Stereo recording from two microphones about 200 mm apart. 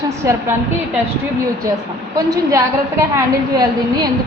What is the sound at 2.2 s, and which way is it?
A woman's voice, 15° right (ahead or behind).